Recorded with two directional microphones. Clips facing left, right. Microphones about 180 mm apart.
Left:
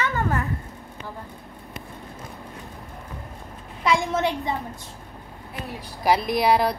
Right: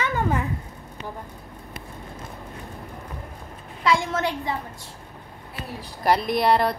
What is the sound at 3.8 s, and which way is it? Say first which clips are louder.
Speech: left 1 dB; 20° left (ahead or behind).